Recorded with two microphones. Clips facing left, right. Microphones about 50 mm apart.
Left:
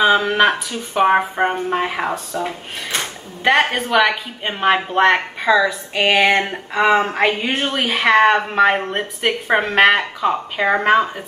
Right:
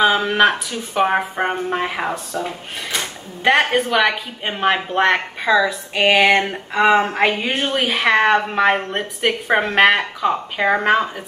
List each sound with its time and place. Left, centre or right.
0.0 s a woman's voice: centre
2.3 s speech: left
3.4 s a woman's voice: centre